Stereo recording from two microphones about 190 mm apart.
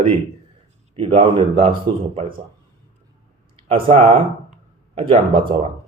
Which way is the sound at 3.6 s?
30° right (ahead or behind).